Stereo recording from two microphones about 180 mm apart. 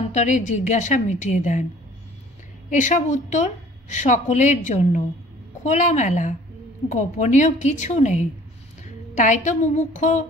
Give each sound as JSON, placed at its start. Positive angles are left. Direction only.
{"t": 0.1, "sound": "a woman's voice", "side_deg": 45}
{"t": 2.7, "sound": "a woman's voice", "side_deg": 45}